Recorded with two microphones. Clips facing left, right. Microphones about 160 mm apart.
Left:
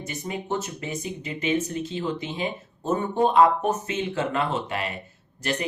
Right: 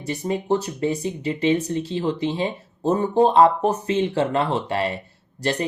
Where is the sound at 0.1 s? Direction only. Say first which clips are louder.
Right 8 dB; 35° right (ahead or behind).